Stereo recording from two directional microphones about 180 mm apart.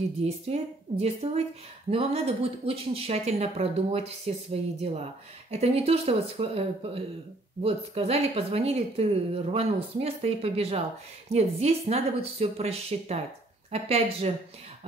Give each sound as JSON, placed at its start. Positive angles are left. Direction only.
{"t": 0.2, "sound": "speech", "side_deg": -35}
{"t": 5.5, "sound": "speech", "side_deg": -35}